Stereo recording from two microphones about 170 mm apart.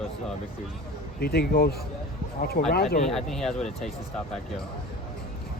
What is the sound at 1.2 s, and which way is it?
A man's voice, 65° left (ahead or behind).